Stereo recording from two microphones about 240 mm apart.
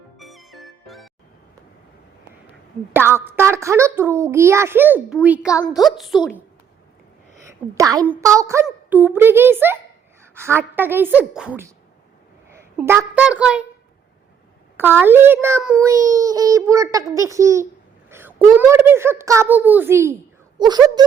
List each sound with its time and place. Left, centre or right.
0.2 s music: centre
2.9 s a child's voice: centre
5.5 s a woman's voice: centre
5.8 s a woman's voice: centre
7.4 s a child's voice: centre
14.8 s a child's voice: centre
18.1 s a sound: centre
18.7 s a child's voice: centre